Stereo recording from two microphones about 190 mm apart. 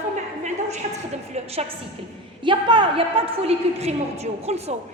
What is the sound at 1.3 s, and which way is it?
A woman's voice, 35° right (ahead or behind).